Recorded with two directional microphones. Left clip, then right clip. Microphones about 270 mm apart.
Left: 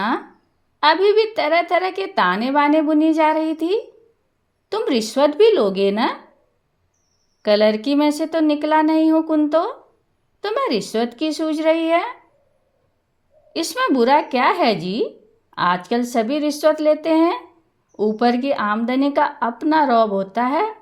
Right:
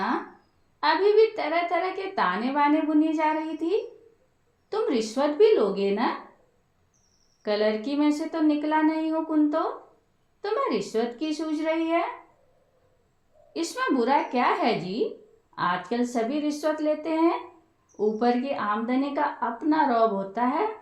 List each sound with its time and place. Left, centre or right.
0.8 s a woman's voice: left
7.4 s a woman's voice: left
13.5 s a woman's voice: left